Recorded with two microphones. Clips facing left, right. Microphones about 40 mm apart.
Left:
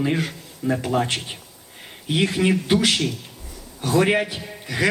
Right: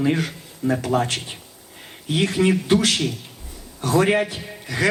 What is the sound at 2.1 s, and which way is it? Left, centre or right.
Speech, centre.